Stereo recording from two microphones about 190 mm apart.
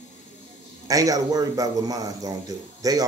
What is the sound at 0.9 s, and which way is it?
A man's voice, 20° right (ahead or behind).